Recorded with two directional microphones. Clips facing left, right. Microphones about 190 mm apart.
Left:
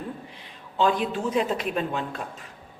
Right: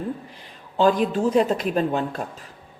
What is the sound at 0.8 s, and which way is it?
Speech, 45° right (ahead or behind).